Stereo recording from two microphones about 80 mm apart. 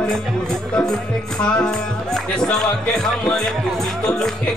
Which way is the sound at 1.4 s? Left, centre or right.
Centre.